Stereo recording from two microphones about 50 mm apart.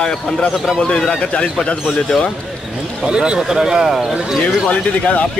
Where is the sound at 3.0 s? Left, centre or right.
Centre.